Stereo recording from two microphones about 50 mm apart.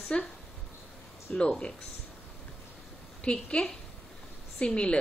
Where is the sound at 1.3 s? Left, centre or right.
Centre.